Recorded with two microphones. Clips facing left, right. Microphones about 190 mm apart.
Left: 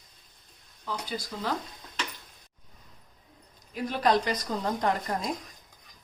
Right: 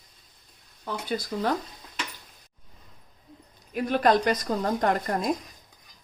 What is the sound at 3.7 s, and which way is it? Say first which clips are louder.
A woman's voice: right 3 dB; 55° right (ahead or behind).